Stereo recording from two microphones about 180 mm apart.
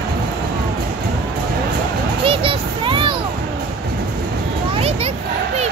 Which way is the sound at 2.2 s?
30° right (ahead or behind).